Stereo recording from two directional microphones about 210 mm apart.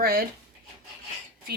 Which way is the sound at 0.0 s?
45° right (ahead or behind).